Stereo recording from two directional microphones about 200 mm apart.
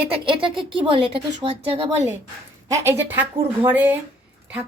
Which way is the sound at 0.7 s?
25° right (ahead or behind).